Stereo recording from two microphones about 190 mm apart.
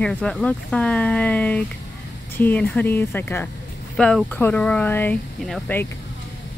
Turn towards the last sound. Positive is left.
turn(degrees=5)  # may be behind; listen again after turning